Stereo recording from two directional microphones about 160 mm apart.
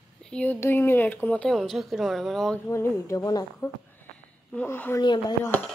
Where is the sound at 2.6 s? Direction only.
15° left (ahead or behind).